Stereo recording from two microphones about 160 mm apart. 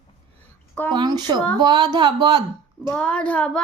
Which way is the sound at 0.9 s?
25° right (ahead or behind).